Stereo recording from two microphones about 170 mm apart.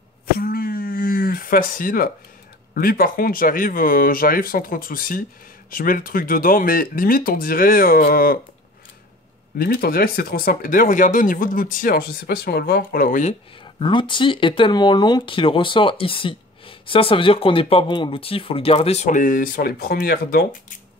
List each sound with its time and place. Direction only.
0.4 s a sound: 60° left (ahead or behind)
2.7 s speech: 60° left (ahead or behind)
9.6 s speech: 60° left (ahead or behind)
13.7 s speech: 30° left (ahead or behind); by 20.4 s 65° left (ahead or behind)